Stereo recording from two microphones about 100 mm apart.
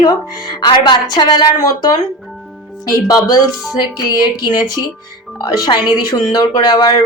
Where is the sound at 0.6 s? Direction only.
45° left (ahead or behind).